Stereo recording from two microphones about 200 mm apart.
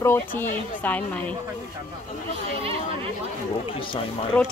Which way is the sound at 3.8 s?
25° left (ahead or behind).